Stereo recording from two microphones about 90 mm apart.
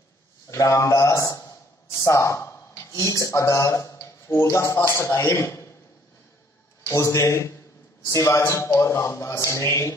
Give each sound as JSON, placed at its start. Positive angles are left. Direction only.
{"t": 0.5, "sound": "a man's voice", "side_deg": 35}
{"t": 6.9, "sound": "a man's voice", "side_deg": 35}